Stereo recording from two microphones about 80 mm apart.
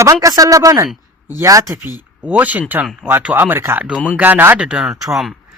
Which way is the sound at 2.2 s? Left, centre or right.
Centre.